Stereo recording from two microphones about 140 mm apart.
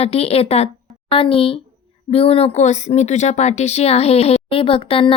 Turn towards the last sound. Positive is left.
turn(degrees=40)  # may be behind; listen again after turning